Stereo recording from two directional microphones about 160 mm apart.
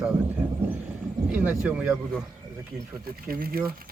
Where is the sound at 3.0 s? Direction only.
70° right (ahead or behind).